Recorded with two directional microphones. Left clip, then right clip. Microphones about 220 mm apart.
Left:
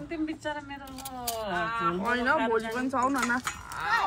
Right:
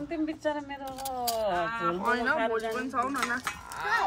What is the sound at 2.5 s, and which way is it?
Speech, 15° left (ahead or behind).